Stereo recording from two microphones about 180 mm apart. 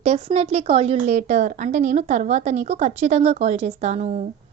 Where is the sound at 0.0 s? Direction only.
35° right (ahead or behind).